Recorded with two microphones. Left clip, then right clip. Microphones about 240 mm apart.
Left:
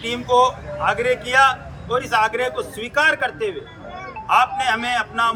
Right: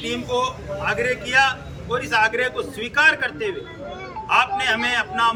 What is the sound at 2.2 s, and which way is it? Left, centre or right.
Speech, right.